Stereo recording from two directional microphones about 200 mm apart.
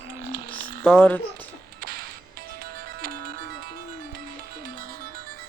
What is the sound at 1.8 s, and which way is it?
Music, 50° right (ahead or behind).